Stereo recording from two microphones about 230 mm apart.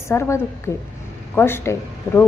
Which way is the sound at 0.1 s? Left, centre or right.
Centre.